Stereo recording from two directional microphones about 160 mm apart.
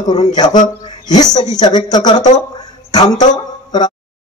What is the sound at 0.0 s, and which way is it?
A man's voice, 25° left (ahead or behind).